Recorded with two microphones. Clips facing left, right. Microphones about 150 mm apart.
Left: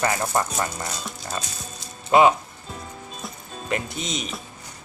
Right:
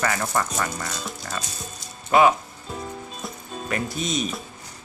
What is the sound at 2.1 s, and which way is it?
Speech, 20° left (ahead or behind).